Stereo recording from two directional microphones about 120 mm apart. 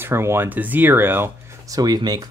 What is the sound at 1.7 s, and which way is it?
Speech, 35° right (ahead or behind).